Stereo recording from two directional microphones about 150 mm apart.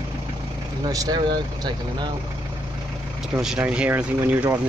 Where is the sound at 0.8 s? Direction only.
25° right (ahead or behind).